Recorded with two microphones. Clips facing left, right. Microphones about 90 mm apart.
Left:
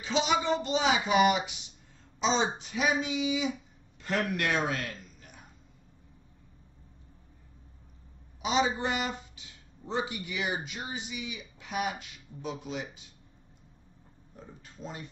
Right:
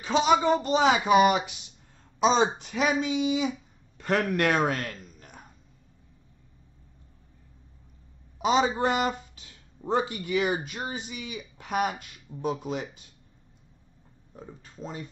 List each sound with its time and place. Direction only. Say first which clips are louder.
0.0 s a man's voice: right 6 dB; 45° right (ahead or behind)
8.4 s a man's voice: right 5 dB; 45° right (ahead or behind)
14.3 s speech: right 5 dB; 40° right (ahead or behind)